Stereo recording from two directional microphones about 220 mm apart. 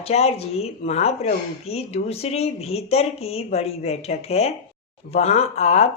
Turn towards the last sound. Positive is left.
turn(degrees=30)  # may be behind; listen again after turning